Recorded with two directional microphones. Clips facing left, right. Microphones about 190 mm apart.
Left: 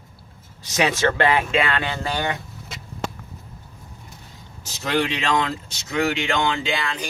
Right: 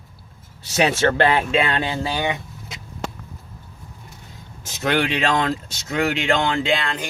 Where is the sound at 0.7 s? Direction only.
35° right (ahead or behind).